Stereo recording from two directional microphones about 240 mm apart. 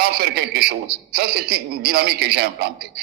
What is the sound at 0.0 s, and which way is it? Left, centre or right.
A man's voice, right.